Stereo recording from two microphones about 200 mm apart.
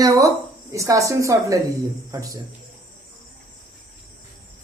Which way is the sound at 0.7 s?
15° right (ahead or behind).